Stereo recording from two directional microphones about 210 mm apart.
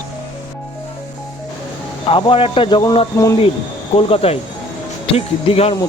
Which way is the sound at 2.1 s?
25° left (ahead or behind).